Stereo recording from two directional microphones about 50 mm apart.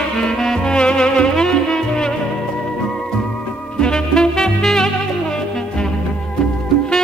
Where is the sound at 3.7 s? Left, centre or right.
Centre.